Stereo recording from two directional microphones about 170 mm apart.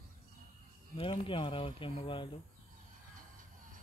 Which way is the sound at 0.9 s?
30° left (ahead or behind).